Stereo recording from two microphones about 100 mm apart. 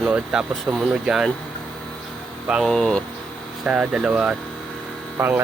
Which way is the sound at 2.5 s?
Centre (ahead or behind).